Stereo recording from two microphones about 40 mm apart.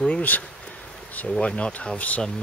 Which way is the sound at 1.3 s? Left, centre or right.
Left.